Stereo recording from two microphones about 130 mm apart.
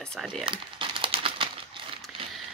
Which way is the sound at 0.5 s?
40° right (ahead or behind).